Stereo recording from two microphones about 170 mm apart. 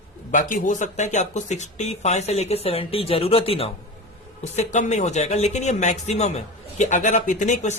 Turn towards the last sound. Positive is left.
turn(degrees=45)  # may be behind; listen again after turning